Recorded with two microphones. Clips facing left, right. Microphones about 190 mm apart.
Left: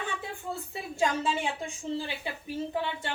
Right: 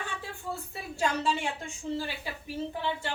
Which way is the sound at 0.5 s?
20° left (ahead or behind).